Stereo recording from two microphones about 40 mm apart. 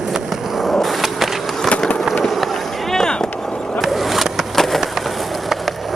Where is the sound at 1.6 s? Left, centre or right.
Left.